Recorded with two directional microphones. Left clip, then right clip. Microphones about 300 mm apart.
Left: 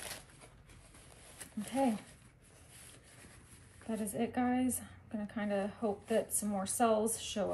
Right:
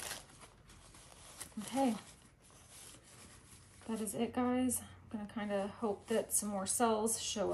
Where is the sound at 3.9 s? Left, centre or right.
Centre.